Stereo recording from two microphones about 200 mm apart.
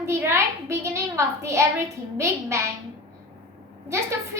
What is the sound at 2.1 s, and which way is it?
Speech, 15° right (ahead or behind).